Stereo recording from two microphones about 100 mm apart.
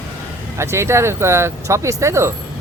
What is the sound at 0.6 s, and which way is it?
Speech, 25° right (ahead or behind).